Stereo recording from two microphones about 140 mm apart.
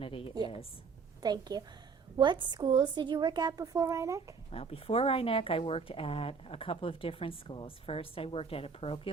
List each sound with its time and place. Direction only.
0.0 s a woman's voice: 40° left (ahead or behind)
1.2 s a woman's voice: 30° right (ahead or behind)
4.5 s a woman's voice: 45° left (ahead or behind)